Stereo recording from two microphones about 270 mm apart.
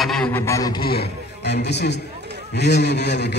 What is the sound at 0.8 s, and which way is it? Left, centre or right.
A man's voice, left.